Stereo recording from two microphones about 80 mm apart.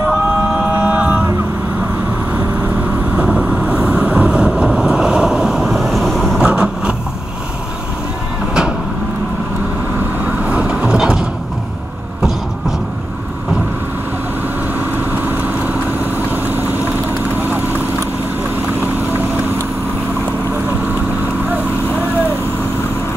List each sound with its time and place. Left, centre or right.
0.7 s vehicle: centre
3.2 s vehicle: centre
6.4 s vehicle: centre
10.2 s vehicle: centre
15.2 s vehicle: right